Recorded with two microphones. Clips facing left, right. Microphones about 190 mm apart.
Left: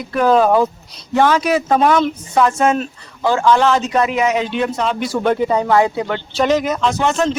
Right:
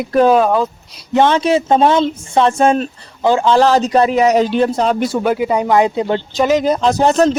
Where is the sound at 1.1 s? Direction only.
25° right (ahead or behind).